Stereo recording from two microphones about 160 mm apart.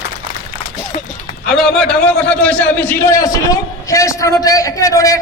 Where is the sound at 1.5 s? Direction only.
5° left (ahead or behind); by 5.2 s 20° left (ahead or behind).